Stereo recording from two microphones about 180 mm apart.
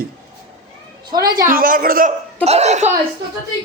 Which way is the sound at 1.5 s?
50° right (ahead or behind).